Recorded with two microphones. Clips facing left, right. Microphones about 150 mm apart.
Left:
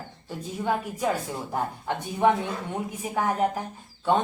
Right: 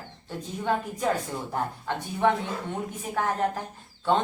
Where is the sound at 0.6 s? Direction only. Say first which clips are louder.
Even; 10° left (ahead or behind).